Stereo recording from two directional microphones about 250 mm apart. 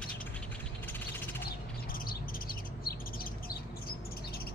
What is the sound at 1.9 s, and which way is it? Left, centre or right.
Bird, left.